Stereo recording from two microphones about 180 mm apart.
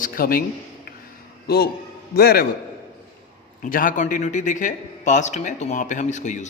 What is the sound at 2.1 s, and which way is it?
Speech, 60° left (ahead or behind).